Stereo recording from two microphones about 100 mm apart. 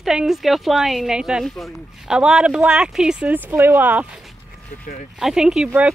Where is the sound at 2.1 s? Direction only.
10° right (ahead or behind).